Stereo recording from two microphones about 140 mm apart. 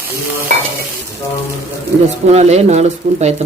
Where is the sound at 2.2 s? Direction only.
50° right (ahead or behind).